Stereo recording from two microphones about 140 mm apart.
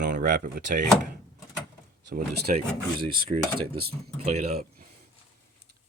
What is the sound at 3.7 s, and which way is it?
Speech, 45° right (ahead or behind).